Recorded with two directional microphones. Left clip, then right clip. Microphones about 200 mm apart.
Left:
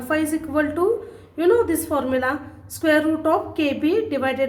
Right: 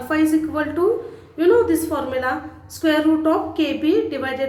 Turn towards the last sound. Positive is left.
turn(degrees=25)  # may be behind; listen again after turning